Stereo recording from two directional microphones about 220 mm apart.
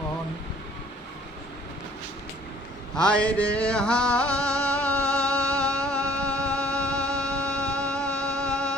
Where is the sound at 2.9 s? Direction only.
5° left (ahead or behind).